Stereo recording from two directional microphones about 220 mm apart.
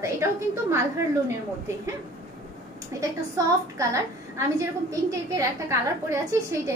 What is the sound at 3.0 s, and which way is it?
A woman's voice, 15° right (ahead or behind).